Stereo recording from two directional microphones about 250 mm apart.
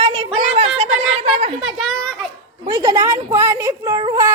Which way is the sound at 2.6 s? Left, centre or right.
Centre.